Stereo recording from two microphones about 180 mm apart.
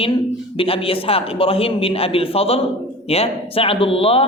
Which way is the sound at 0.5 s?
30° left (ahead or behind).